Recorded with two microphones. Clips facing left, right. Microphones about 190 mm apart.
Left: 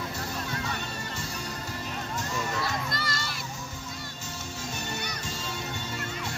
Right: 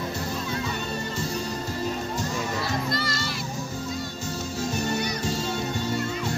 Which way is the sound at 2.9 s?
50° left (ahead or behind).